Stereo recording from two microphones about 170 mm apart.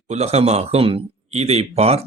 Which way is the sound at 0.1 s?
40° right (ahead or behind).